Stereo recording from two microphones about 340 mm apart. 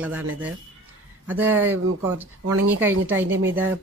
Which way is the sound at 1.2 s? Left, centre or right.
Centre.